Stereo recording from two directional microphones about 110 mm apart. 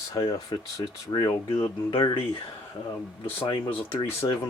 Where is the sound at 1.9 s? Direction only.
55° left (ahead or behind).